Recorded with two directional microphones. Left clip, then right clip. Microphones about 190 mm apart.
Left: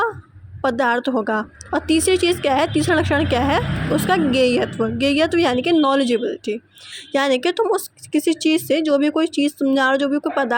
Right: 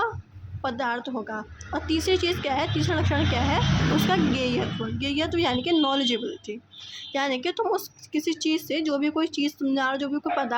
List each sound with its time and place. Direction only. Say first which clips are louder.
0.6 s a woman's voice: left 10 dB; 35° left (ahead or behind)